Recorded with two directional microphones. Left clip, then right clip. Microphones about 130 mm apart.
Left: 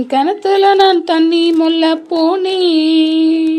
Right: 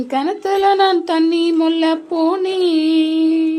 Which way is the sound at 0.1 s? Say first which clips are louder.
Left 5 dB; 30° left (ahead or behind).